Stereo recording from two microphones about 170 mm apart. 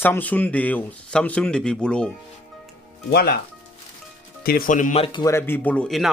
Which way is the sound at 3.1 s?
65° left (ahead or behind).